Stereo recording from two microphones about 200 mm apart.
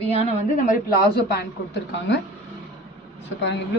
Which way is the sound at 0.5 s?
45° left (ahead or behind).